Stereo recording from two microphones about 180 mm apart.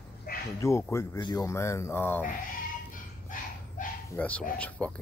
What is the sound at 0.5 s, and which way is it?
Speech, 15° left (ahead or behind).